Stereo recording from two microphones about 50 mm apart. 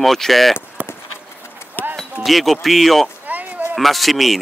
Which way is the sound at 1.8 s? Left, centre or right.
Left.